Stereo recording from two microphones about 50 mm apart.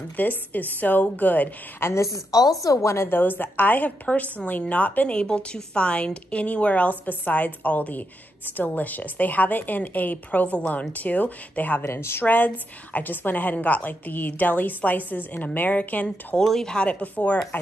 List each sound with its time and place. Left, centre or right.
0.2 s a woman's voice: left
1.8 s speech: left
2.3 s speech: left
2.8 s speech: left
3.1 s a woman's voice: left
11.8 s speech: left
12.2 s a woman's voice: left
16.3 s speech: centre
16.9 s a woman's voice: left